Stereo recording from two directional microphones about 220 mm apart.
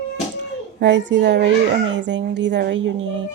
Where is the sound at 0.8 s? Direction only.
55° right (ahead or behind).